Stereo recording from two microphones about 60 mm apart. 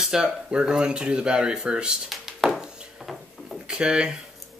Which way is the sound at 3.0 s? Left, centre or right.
Centre.